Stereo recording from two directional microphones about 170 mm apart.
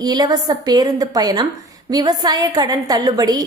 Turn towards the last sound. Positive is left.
turn(degrees=-20)  # may be behind; listen again after turning